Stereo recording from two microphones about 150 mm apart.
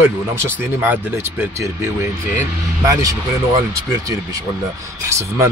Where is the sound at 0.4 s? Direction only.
15° right (ahead or behind).